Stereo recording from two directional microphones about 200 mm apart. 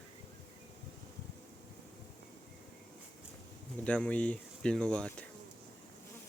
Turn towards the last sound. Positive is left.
turn(degrees=5)  # may be behind; listen again after turning